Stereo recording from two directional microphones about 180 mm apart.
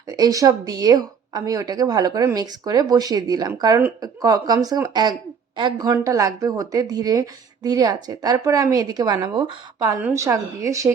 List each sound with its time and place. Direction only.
0.1 s a woman's voice: 20° right (ahead or behind)